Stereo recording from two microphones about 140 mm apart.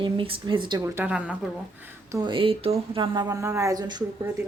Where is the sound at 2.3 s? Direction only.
40° right (ahead or behind); by 4.1 s 25° right (ahead or behind).